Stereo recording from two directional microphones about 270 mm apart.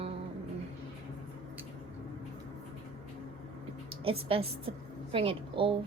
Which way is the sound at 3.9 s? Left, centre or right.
Centre.